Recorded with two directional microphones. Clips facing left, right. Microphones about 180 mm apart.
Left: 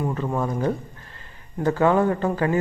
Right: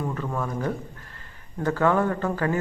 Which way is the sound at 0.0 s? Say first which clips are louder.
Left 4 dB; 20° left (ahead or behind).